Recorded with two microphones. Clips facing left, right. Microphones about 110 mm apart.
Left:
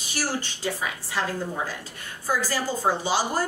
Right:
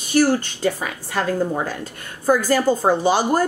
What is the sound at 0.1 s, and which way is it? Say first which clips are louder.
A woman's voice: right 12 dB; 55° right (ahead or behind).